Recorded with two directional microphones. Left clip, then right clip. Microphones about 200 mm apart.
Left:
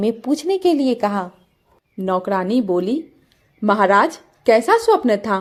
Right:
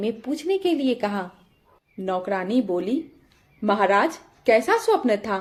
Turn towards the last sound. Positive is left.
turn(degrees=25)  # may be behind; listen again after turning